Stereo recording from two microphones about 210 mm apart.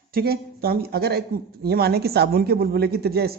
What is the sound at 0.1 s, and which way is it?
Speech, 45° right (ahead or behind).